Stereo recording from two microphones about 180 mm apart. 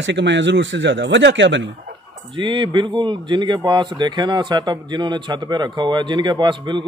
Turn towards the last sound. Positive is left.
turn(degrees=-25)  # may be behind; listen again after turning